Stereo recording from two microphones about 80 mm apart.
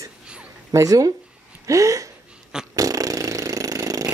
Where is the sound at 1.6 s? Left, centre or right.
Right.